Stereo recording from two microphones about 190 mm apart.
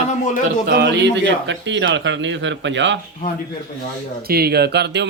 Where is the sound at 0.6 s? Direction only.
60° right (ahead or behind).